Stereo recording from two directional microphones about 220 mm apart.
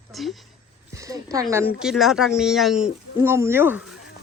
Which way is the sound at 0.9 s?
15° right (ahead or behind).